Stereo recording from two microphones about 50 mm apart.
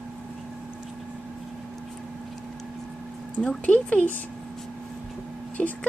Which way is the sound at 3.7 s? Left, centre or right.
Left.